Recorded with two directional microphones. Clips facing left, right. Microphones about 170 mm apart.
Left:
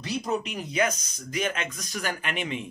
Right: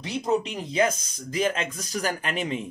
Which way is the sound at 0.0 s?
20° right (ahead or behind).